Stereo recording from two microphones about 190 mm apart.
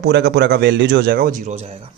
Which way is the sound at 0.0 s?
60° right (ahead or behind).